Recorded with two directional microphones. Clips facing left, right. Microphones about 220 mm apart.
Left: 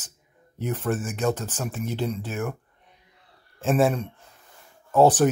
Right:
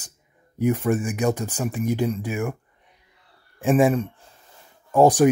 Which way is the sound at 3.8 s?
5° right (ahead or behind).